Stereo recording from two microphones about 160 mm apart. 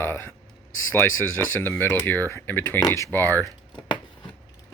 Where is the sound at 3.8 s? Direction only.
30° left (ahead or behind).